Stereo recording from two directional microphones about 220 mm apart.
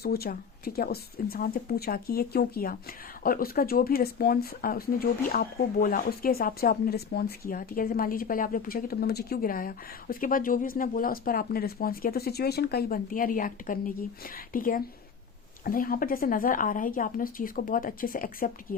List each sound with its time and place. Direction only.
0.0 s speech: 45° left (ahead or behind)